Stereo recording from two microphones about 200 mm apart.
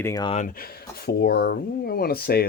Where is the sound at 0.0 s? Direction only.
20° left (ahead or behind).